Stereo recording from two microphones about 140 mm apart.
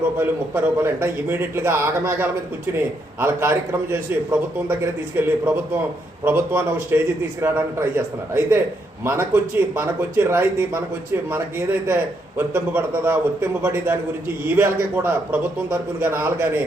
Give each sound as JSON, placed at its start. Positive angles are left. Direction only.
{"t": 0.2, "sound": "speech", "side_deg": -15}